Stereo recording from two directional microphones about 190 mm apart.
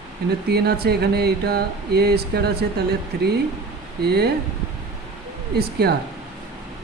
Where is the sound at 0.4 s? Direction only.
60° right (ahead or behind).